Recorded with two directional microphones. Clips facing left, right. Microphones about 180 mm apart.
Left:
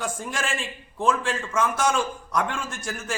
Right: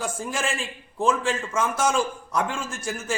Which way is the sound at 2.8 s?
25° right (ahead or behind).